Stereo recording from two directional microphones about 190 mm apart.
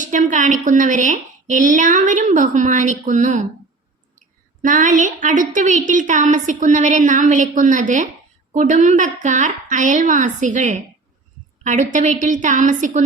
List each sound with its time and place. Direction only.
0.0 s a woman's voice: 40° right (ahead or behind)
4.6 s a woman's voice: 45° right (ahead or behind)